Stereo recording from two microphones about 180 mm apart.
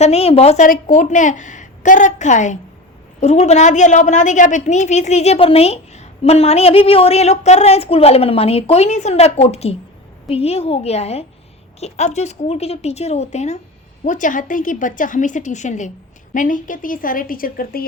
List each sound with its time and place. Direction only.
0.0 s a woman's voice: 35° left (ahead or behind); by 17.8 s 55° left (ahead or behind)